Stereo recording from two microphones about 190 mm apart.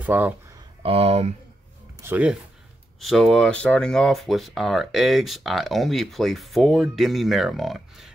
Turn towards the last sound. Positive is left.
turn(degrees=0)  # may be behind; listen again after turning